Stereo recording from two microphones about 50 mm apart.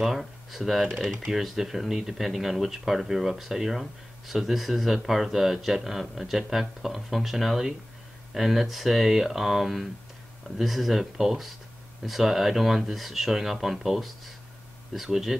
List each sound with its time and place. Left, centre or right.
0.0 s a man's voice: centre